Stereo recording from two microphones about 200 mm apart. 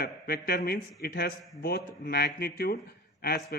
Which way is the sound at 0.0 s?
50° left (ahead or behind).